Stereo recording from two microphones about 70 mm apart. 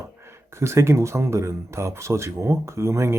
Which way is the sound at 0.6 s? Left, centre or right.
Right.